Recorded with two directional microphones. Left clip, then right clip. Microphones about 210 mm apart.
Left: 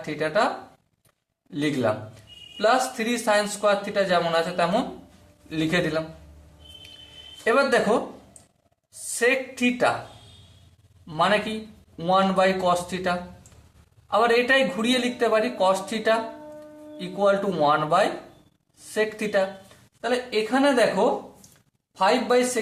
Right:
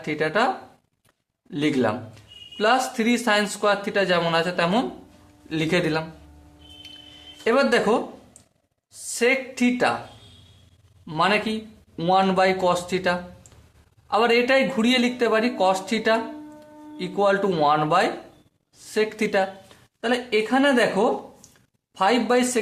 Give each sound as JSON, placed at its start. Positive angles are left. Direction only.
{"t": 0.0, "sound": "speech", "side_deg": -40}
{"t": 1.5, "sound": "speech", "side_deg": -40}
{"t": 7.4, "sound": "speech", "side_deg": -35}
{"t": 9.1, "sound": "speech", "side_deg": -30}
{"t": 11.0, "sound": "speech", "side_deg": -35}